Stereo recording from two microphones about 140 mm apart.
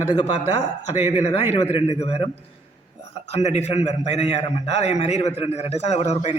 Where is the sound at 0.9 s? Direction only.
50° left (ahead or behind).